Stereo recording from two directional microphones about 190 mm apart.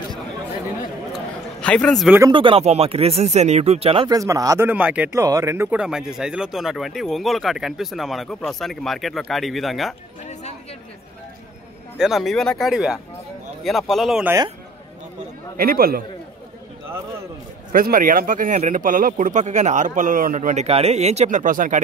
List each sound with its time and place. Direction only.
1.6 s speech: 5° left (ahead or behind)
2.3 s speech: 30° right (ahead or behind)
4.2 s speech: 15° right (ahead or behind); by 9.9 s centre (ahead or behind)
12.0 s speech: centre (ahead or behind)
15.5 s speech: 50° right (ahead or behind)
17.7 s speech: 50° right (ahead or behind)